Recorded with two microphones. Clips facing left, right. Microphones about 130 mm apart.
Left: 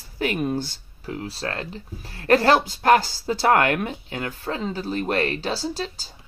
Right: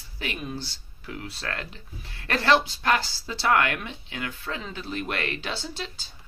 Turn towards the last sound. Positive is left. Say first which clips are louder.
# left 8 dB
turn(degrees=35)  # may be behind; listen again after turning